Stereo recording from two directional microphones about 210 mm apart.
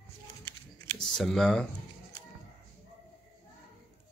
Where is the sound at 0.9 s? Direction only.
Centre (ahead or behind).